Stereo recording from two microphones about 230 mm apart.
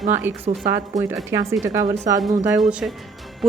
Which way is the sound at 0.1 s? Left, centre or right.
Centre.